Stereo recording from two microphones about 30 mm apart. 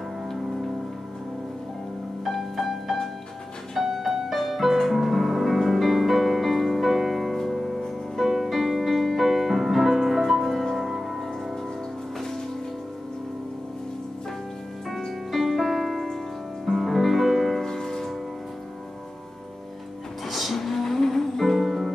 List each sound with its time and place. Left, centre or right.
2.2 s music: centre
10.4 s music: centre
10.9 s music: centre
15.3 s music: centre
17.6 s music: centre
20.2 s music: centre
21.5 s music: centre